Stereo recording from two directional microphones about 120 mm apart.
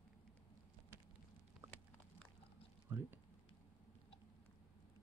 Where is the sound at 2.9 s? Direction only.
20° right (ahead or behind).